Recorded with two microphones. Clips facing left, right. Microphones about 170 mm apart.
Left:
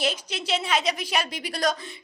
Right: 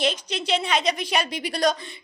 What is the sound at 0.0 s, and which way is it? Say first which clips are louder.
A woman's voice: right 3 dB; 5° left (ahead or behind).